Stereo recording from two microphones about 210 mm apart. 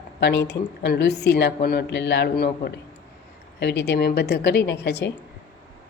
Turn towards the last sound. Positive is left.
turn(degrees=50)  # may be behind; listen again after turning